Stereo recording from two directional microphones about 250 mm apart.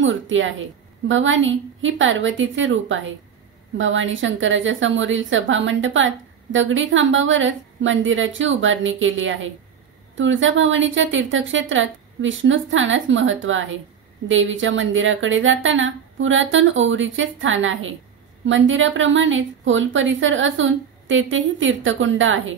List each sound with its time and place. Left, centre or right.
0.0 s a woman's voice: right